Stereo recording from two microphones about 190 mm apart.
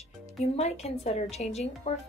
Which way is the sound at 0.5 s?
35° left (ahead or behind).